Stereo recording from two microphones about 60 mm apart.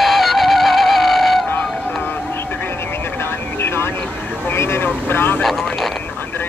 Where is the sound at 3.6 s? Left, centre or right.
Left.